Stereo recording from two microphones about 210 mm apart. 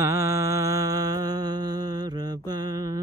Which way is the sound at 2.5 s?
20° right (ahead or behind).